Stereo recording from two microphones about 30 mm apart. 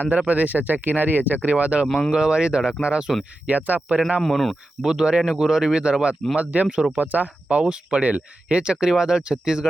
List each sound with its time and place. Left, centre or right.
0.2 s speech: right
1.5 s speech: right
2.1 s speech: right
2.8 s speech: right
3.4 s speech: right
4.2 s speech: centre
4.8 s speech: right
5.8 s speech: right
6.3 s speech: right
6.9 s speech: right
7.6 s speech: right
9.3 s speech: right